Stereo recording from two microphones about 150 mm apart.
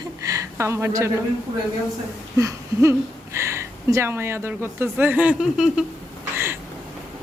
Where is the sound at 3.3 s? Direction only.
15° right (ahead or behind).